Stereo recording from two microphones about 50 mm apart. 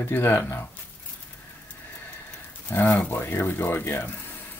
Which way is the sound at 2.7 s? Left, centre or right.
Left.